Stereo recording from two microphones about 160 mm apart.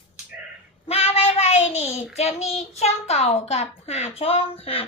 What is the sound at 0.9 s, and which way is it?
Child singing, 40° left (ahead or behind).